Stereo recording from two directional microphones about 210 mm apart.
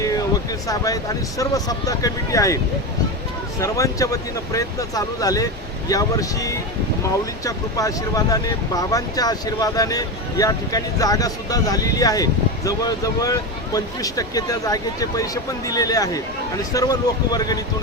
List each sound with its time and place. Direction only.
1.4 s speech: 15° left (ahead or behind)
3.6 s speech: 15° left (ahead or behind)